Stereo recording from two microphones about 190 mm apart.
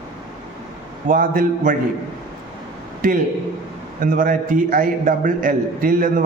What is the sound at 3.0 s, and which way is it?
A man's voice, 45° right (ahead or behind).